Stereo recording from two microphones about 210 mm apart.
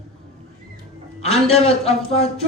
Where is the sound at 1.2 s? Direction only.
30° left (ahead or behind).